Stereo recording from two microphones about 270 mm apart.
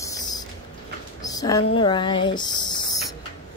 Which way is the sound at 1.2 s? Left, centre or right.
Centre.